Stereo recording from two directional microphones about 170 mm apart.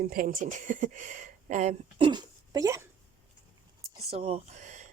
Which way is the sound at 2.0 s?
25° right (ahead or behind).